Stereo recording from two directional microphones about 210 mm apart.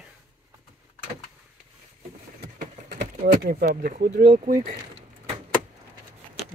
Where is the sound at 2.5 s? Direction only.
40° right (ahead or behind).